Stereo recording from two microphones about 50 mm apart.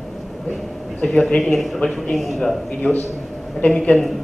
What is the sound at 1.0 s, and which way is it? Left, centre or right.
Speech, centre.